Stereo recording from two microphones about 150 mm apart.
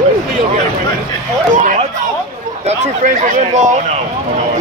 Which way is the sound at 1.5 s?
55° right (ahead or behind).